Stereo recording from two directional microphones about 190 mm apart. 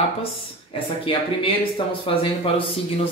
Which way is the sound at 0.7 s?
30° left (ahead or behind).